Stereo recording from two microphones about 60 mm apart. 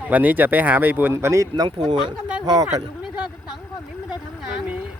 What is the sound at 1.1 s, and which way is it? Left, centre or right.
Speech, right.